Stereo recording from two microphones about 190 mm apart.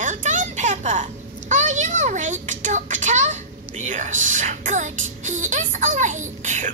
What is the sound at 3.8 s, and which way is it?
Speech, 40° right (ahead or behind).